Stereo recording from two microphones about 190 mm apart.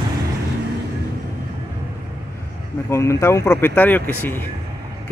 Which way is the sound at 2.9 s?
15° left (ahead or behind).